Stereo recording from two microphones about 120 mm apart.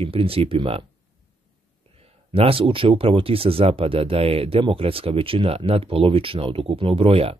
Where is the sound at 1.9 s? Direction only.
55° right (ahead or behind).